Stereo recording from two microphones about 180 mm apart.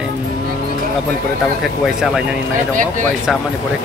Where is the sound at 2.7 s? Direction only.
45° right (ahead or behind).